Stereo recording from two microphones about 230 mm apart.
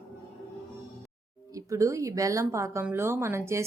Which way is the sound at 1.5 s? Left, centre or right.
Centre.